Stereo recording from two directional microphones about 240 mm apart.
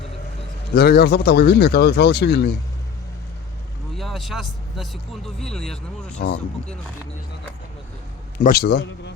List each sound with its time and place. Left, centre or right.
0.8 s speech: left
3.9 s speech: centre
6.1 s speech: left
8.4 s speech: left